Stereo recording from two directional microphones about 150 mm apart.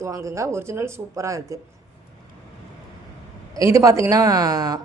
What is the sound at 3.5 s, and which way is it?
A woman's voice, 20° right (ahead or behind).